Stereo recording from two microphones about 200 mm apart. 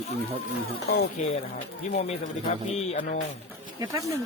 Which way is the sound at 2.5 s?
30° left (ahead or behind).